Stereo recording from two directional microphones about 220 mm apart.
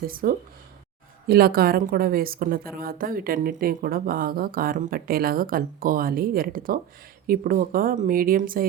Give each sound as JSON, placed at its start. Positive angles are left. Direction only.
{"t": 0.0, "sound": "a woman's voice", "side_deg": -40}